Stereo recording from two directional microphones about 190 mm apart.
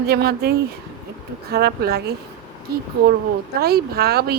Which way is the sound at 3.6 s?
55° right (ahead or behind).